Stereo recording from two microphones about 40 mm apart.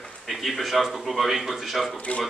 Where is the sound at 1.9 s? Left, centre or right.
Left.